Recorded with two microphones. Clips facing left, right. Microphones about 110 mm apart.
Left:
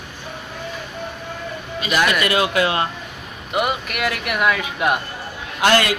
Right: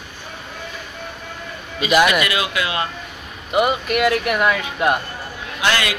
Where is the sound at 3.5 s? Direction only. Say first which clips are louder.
Right 4 dB; centre (ahead or behind).